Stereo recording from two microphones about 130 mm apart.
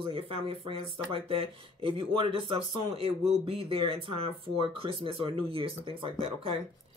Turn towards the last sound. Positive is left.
turn(degrees=-45)  # may be behind; listen again after turning